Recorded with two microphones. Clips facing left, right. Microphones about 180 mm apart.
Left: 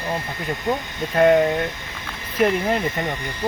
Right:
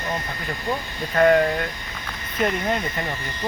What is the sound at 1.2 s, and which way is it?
Speech, 15° left (ahead or behind).